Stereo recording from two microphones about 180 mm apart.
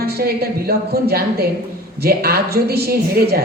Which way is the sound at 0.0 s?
60° right (ahead or behind).